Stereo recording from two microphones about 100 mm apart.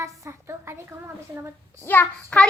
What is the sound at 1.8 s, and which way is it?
Speech, 20° left (ahead or behind).